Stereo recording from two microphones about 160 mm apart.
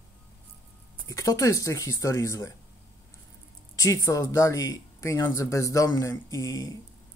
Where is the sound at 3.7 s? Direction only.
20° left (ahead or behind).